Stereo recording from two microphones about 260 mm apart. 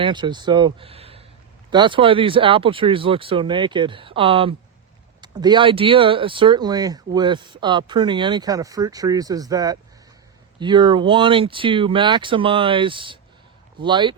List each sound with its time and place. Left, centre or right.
0.0 s speech: centre